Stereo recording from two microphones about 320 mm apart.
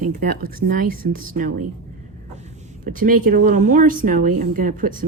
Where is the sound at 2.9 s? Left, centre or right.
Right.